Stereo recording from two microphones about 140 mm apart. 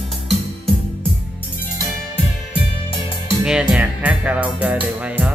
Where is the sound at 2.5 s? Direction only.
40° left (ahead or behind).